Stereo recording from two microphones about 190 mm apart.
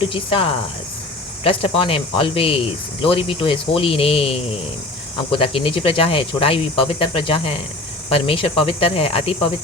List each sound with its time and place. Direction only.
0.0 s speech: 30° left (ahead or behind)
1.5 s speech: 30° left (ahead or behind)